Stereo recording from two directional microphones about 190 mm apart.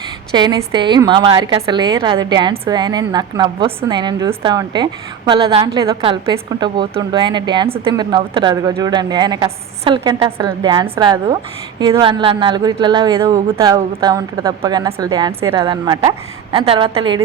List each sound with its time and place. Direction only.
0.3 s a woman's voice: 25° right (ahead or behind)